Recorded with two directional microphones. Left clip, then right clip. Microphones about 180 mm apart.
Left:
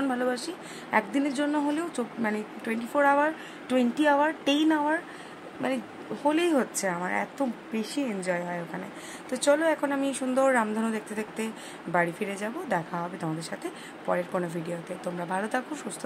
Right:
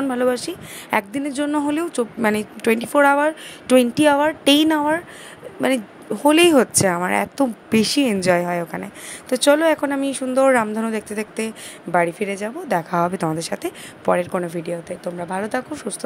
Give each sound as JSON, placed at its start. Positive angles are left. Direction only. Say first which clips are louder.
{"t": 0.1, "sound": "speech", "louder": "right 9 dB", "side_deg": -25}
{"t": 2.2, "sound": "a woman's voice", "louder": "right 14 dB", "side_deg": -40}
{"t": 6.2, "sound": "a woman's voice", "louder": "right 11 dB", "side_deg": -35}
{"t": 12.9, "sound": "speech", "louder": "right 12 dB", "side_deg": -35}